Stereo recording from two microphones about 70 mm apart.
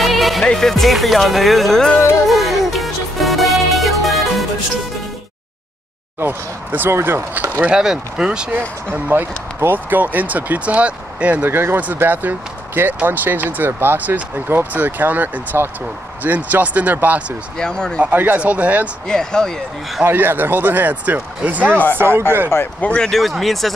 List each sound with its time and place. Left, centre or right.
0.0 s music: centre
0.5 s speech: centre
2.2 s music: centre
6.1 s speech: right
7.6 s speech: centre
8.5 s speech: right
11.4 s speech: right
17.6 s speech: centre
18.0 s speech: right
19.0 s speech: centre
20.0 s speech: right
22.8 s speech: centre